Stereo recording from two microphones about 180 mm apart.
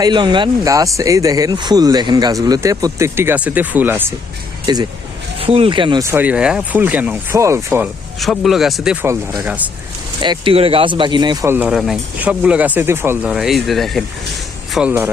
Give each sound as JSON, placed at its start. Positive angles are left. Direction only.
{"t": 0.0, "sound": "speech", "side_deg": -25}
{"t": 4.6, "sound": "speech", "side_deg": -20}
{"t": 6.1, "sound": "speech", "side_deg": -10}
{"t": 8.2, "sound": "speech", "side_deg": 0}
{"t": 10.2, "sound": "speech", "side_deg": -25}